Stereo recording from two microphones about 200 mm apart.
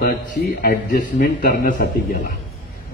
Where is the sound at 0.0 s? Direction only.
45° left (ahead or behind).